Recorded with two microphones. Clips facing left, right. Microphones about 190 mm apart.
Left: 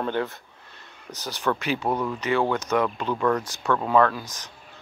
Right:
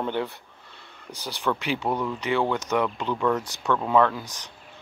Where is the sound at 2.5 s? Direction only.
15° right (ahead or behind).